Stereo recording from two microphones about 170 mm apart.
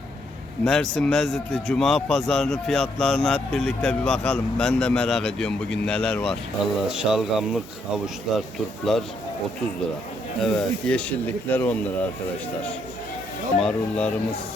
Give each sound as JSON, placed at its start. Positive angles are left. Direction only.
{"t": 0.6, "sound": "speech", "side_deg": 5}
{"t": 10.4, "sound": "speech", "side_deg": 5}
{"t": 13.6, "sound": "speech", "side_deg": 5}